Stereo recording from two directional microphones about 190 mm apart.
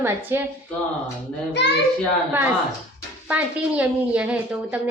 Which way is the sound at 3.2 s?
5° right (ahead or behind).